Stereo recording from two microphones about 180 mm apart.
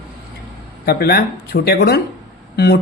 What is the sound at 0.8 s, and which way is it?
A man's voice, 60° left (ahead or behind).